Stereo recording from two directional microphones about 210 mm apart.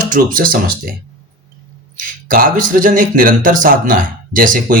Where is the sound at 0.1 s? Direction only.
40° right (ahead or behind).